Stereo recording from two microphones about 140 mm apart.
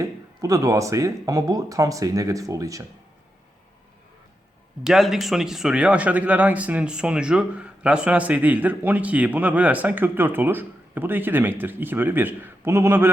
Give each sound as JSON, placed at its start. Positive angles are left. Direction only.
{"t": 0.0, "sound": "speech", "side_deg": -25}
{"t": 4.8, "sound": "speech", "side_deg": 0}